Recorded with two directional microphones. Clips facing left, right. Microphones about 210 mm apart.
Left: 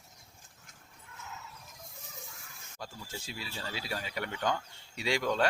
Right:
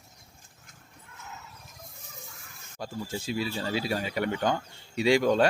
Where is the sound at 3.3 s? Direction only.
75° right (ahead or behind).